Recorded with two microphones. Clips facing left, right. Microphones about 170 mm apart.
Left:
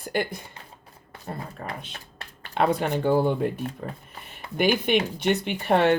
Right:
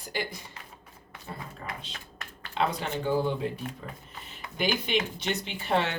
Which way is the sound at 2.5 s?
55° left (ahead or behind).